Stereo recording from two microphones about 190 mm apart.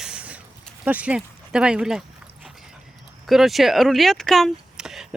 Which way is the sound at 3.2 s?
Centre (ahead or behind).